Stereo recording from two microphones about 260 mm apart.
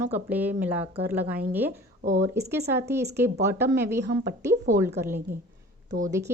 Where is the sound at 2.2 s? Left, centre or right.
Centre.